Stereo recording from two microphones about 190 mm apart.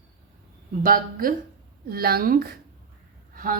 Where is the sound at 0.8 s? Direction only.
50° right (ahead or behind).